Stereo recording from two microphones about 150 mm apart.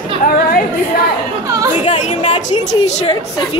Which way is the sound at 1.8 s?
50° left (ahead or behind).